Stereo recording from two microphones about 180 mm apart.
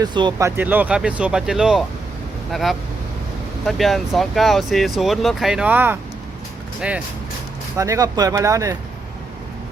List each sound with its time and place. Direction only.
0.0 s speech: 25° right (ahead or behind)
7.8 s speech: 20° right (ahead or behind)